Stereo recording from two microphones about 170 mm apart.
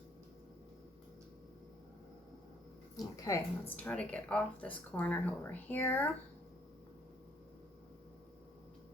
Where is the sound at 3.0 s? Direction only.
20° left (ahead or behind).